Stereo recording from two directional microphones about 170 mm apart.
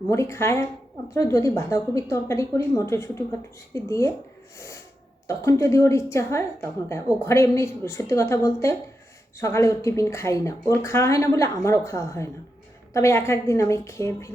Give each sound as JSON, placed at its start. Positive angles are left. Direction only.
{"t": 0.1, "sound": "a woman's voice", "side_deg": 15}
{"t": 5.3, "sound": "a woman's voice", "side_deg": 15}